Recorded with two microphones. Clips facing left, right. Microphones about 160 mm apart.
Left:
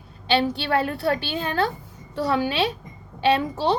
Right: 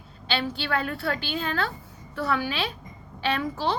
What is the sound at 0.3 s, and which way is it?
A woman's voice, 25° left (ahead or behind).